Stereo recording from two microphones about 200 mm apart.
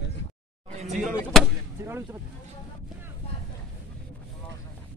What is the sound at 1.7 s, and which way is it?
Speech, 10° right (ahead or behind).